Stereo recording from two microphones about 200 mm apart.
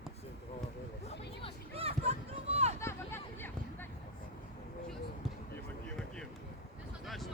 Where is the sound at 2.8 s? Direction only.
10° left (ahead or behind).